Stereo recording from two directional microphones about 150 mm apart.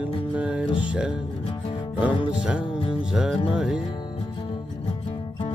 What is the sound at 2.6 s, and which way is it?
Music, 35° left (ahead or behind).